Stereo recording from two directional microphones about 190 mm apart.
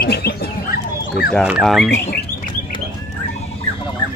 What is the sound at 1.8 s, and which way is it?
Speech, 60° left (ahead or behind).